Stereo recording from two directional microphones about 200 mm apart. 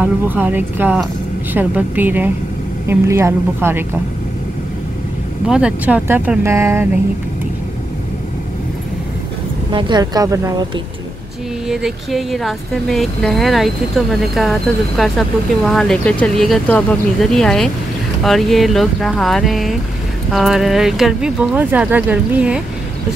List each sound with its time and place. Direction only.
0.0 s speech: 10° right (ahead or behind)
5.5 s speech: 5° right (ahead or behind)
9.7 s speech: 20° right (ahead or behind)
11.6 s speech: centre (ahead or behind)